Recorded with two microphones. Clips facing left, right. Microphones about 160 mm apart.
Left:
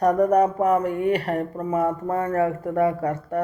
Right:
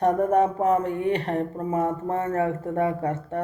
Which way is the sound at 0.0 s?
25° right (ahead or behind).